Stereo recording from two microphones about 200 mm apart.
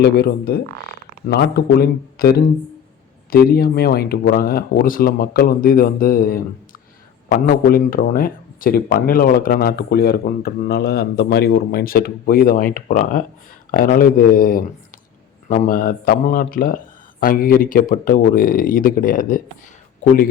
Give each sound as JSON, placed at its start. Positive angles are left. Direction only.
{"t": 0.0, "sound": "speech", "side_deg": 55}